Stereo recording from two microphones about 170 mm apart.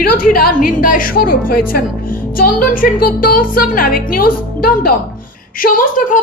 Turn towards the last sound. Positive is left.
turn(degrees=50)  # may be behind; listen again after turning